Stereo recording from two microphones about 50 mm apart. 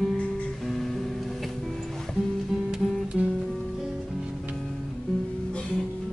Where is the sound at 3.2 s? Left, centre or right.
Centre.